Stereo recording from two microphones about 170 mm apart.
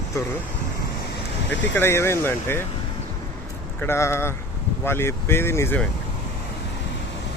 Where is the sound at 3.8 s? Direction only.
15° left (ahead or behind).